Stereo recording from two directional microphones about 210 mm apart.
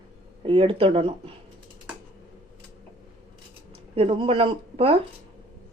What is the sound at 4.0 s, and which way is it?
Speech, 25° right (ahead or behind).